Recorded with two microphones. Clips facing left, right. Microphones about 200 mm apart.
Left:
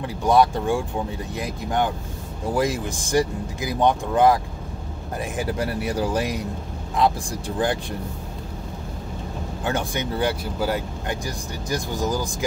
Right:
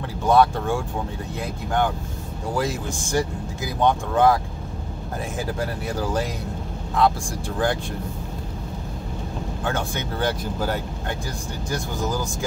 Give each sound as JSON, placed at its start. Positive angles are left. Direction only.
{"t": 0.3, "sound": "speech", "side_deg": 15}
{"t": 5.4, "sound": "speech", "side_deg": 15}
{"t": 9.7, "sound": "speech", "side_deg": 15}